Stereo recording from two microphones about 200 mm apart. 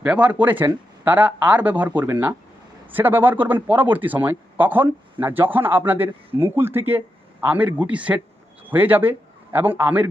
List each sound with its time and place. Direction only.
0.0 s a man's voice: 5° right (ahead or behind)